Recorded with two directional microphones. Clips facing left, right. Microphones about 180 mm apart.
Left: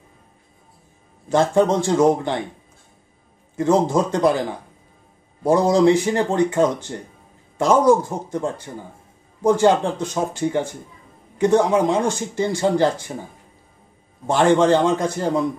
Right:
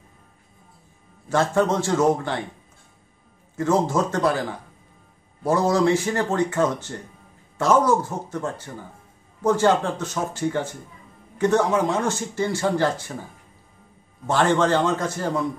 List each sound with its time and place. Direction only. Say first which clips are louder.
1.3 s speech: left 4 dB; 15° left (ahead or behind)
3.5 s speech: left 3 dB; 15° left (ahead or behind)
14.2 s speech: left 4 dB; 15° left (ahead or behind)